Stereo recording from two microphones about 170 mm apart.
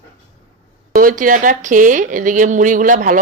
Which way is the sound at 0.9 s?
55° right (ahead or behind).